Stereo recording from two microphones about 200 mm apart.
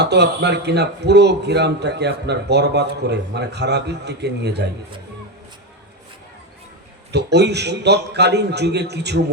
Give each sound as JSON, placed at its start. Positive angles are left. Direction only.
{"t": 0.0, "sound": "speech", "side_deg": -55}
{"t": 7.1, "sound": "speech", "side_deg": -55}